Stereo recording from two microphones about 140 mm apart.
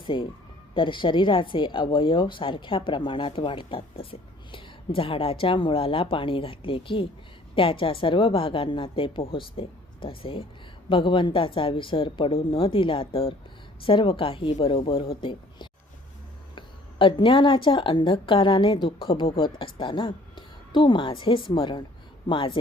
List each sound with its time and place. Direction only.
0.0 s a woman's voice: 35° left (ahead or behind)